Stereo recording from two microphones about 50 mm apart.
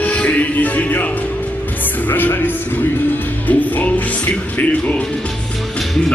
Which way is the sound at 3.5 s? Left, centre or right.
Left.